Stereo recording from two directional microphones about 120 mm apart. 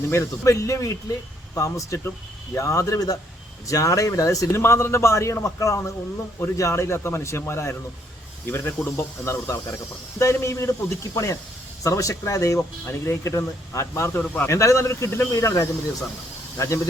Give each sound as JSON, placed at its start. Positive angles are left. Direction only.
{"t": 0.1, "sound": "speech", "side_deg": 25}